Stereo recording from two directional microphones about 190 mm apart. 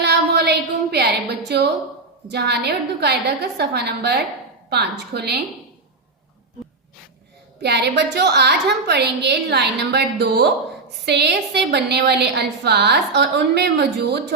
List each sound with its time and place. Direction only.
0.0 s a sound: 60° right (ahead or behind)
1.5 s a woman's voice: 60° right (ahead or behind)
7.6 s a woman's voice: 60° right (ahead or behind)